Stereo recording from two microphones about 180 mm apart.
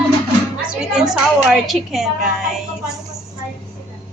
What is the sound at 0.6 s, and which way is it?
A woman's voice, 5° right (ahead or behind).